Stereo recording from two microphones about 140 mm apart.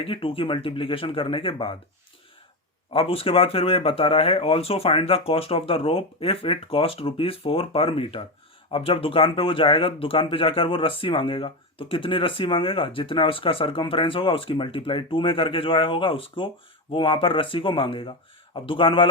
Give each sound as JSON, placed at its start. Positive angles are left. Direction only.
{"t": 0.0, "sound": "speech", "side_deg": 40}
{"t": 2.9, "sound": "speech", "side_deg": 40}